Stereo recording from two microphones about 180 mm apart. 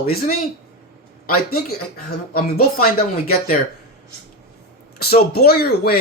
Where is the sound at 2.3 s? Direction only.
55° left (ahead or behind).